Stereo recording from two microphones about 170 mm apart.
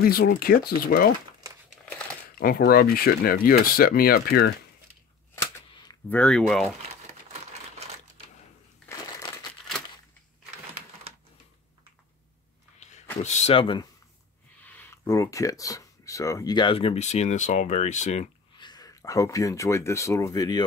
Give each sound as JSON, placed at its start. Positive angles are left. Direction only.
{"t": 0.0, "sound": "speech", "side_deg": 60}
{"t": 2.3, "sound": "speech", "side_deg": 60}
{"t": 5.3, "sound": "a sound", "side_deg": 20}
{"t": 6.0, "sound": "speech", "side_deg": 5}
{"t": 8.8, "sound": "crushing", "side_deg": 5}
{"t": 12.7, "sound": "a sound", "side_deg": 45}
{"t": 13.2, "sound": "speech", "side_deg": 40}
{"t": 14.6, "sound": "speech", "side_deg": 10}
{"t": 18.6, "sound": "speech", "side_deg": 25}